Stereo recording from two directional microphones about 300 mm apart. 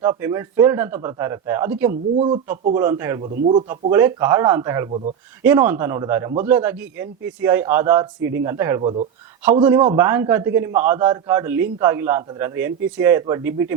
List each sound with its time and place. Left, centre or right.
0.0 s a man's voice: centre
3.2 s speech: right
3.7 s a man's voice: centre
5.4 s a man's voice: centre
9.4 s a man's voice: centre